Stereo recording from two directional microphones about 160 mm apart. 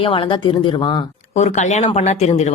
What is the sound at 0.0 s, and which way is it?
Speech, 30° left (ahead or behind).